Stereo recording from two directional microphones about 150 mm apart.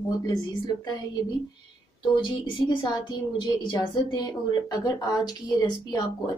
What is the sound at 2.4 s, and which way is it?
A woman's voice, 30° left (ahead or behind).